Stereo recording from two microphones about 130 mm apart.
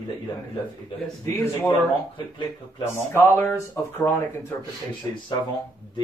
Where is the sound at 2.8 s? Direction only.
20° left (ahead or behind).